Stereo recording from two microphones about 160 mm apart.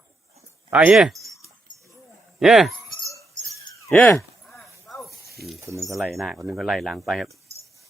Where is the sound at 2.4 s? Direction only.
Centre (ahead or behind).